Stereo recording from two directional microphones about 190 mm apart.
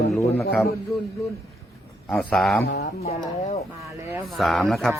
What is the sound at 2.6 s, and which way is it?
Speech, 60° left (ahead or behind).